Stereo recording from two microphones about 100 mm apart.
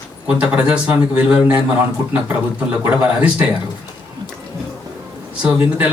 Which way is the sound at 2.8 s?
15° right (ahead or behind).